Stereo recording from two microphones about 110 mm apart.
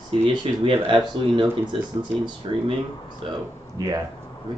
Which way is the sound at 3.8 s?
35° right (ahead or behind).